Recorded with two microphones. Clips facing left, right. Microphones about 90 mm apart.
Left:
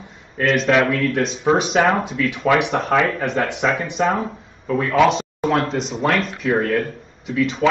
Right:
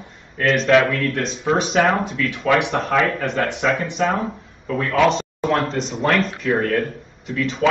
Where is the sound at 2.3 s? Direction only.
15° left (ahead or behind).